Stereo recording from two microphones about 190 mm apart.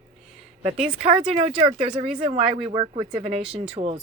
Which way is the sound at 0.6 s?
35° right (ahead or behind).